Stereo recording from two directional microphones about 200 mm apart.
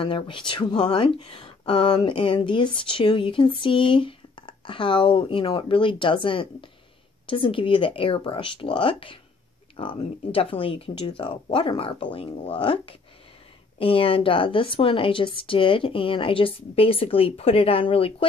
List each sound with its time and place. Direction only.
0.0 s speech: 25° left (ahead or behind)